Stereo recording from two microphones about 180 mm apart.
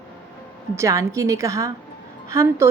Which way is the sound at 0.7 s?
15° right (ahead or behind).